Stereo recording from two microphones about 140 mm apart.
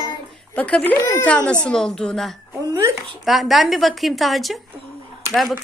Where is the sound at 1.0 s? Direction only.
25° left (ahead or behind).